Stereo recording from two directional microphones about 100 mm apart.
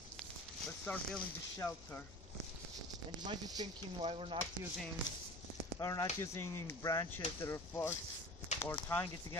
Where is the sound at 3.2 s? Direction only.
40° right (ahead or behind).